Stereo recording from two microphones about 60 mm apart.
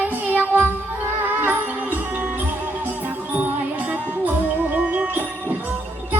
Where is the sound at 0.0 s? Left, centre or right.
Right.